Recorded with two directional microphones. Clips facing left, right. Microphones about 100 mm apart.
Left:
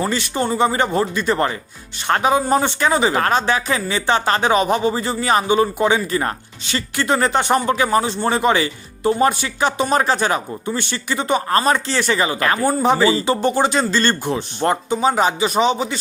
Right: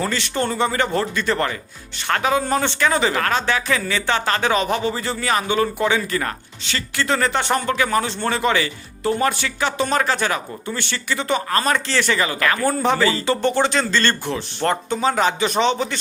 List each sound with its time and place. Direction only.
0.0 s speech: 15° left (ahead or behind)
11.3 s speech: 30° left (ahead or behind)
12.6 s speech: 15° left (ahead or behind)